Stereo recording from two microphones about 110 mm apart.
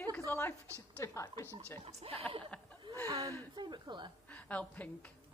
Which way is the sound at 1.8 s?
70° right (ahead or behind).